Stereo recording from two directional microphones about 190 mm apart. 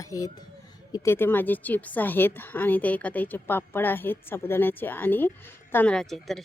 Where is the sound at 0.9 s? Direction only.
15° left (ahead or behind).